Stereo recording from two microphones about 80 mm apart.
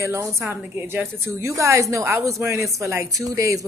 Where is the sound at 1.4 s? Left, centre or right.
Right.